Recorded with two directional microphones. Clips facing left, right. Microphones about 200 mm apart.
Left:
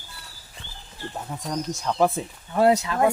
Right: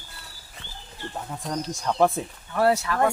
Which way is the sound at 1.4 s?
Centre (ahead or behind).